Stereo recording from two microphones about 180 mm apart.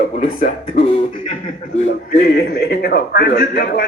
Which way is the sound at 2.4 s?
60° left (ahead or behind).